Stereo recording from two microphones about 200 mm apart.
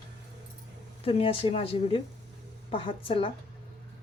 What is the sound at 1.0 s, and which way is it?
A woman's voice, 30° left (ahead or behind).